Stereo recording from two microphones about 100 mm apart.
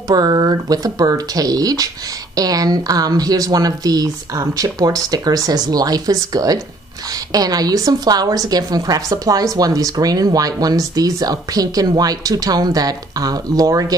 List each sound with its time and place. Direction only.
0.1 s a woman's voice: 40° right (ahead or behind)